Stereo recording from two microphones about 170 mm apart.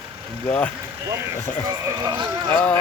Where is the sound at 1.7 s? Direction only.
25° right (ahead or behind).